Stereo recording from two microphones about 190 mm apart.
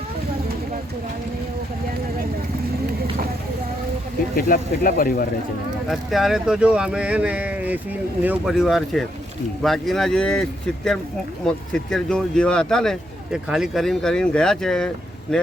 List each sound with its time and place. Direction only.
4.4 s speech: 50° left (ahead or behind)
5.9 s speech: centre (ahead or behind)
11.4 s speech: 5° left (ahead or behind)